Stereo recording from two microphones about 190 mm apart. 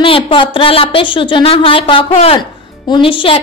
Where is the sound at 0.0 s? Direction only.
30° left (ahead or behind).